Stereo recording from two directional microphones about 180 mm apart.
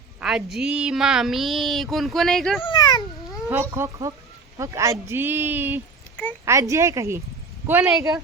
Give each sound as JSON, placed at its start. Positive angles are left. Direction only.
{"t": 0.2, "sound": "speech", "side_deg": -5}
{"t": 2.6, "sound": "a sound", "side_deg": 25}
{"t": 3.5, "sound": "speech", "side_deg": -10}
{"t": 7.7, "sound": "speech", "side_deg": -5}